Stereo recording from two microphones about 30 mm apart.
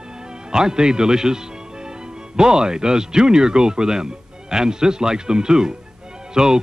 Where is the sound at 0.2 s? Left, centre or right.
Right.